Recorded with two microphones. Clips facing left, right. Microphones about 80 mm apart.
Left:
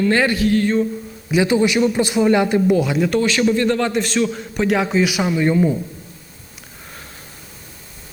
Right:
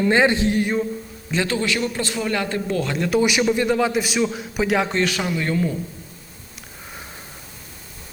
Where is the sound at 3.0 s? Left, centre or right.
Centre.